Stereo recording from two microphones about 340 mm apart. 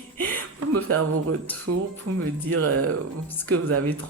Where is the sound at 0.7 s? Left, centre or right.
Right.